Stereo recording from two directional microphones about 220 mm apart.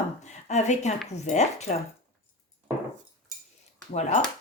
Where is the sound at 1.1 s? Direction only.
30° left (ahead or behind).